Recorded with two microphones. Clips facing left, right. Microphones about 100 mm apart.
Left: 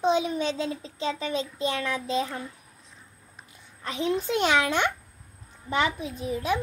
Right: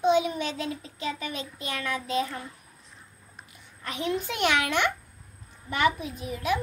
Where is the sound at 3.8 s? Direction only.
30° left (ahead or behind).